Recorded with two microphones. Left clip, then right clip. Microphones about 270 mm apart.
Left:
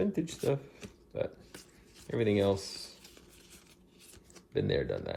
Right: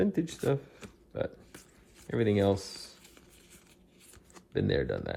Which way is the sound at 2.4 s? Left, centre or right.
Right.